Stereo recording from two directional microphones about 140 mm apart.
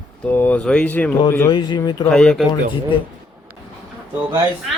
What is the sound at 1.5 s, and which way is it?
Speech, 35° left (ahead or behind).